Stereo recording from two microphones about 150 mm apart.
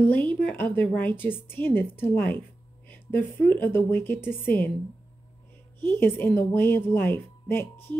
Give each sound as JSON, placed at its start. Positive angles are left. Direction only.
{"t": 0.1, "sound": "a woman's voice", "side_deg": 10}
{"t": 5.8, "sound": "a woman's voice", "side_deg": 15}